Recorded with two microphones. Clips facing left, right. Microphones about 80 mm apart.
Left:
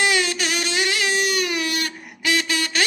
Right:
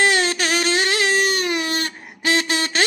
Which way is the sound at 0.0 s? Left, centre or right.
Right.